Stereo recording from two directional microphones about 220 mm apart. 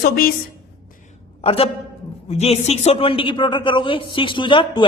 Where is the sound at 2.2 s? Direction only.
30° left (ahead or behind).